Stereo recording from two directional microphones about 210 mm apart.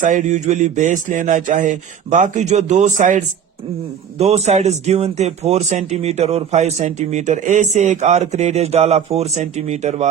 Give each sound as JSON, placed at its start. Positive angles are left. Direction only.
{"t": 0.0, "sound": "speech", "side_deg": -35}